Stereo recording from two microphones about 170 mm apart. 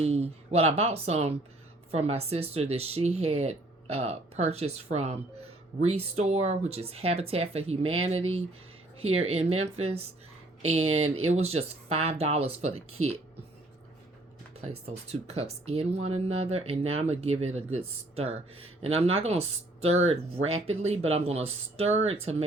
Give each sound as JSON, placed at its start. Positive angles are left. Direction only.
{"t": 0.0, "sound": "speech", "side_deg": -35}
{"t": 14.6, "sound": "speech", "side_deg": -35}